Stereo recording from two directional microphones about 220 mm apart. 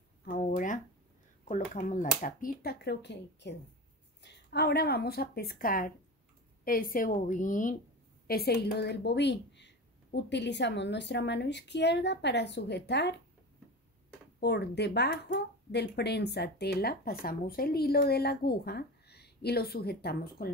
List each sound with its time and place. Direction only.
0.2 s a sound: 40° left (ahead or behind)
1.8 s a woman's voice: 35° left (ahead or behind)
8.3 s a woman's voice: 45° left (ahead or behind)
14.4 s a woman's voice: 50° left (ahead or behind)